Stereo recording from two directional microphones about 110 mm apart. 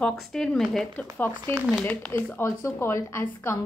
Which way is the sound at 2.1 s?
20° left (ahead or behind).